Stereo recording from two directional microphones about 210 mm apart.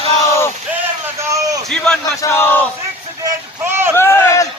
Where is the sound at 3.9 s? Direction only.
10° left (ahead or behind).